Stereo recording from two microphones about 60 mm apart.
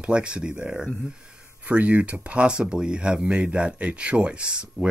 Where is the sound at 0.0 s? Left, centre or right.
Centre.